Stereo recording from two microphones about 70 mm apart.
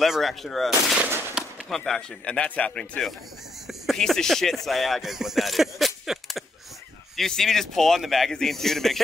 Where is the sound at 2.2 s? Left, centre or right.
Centre.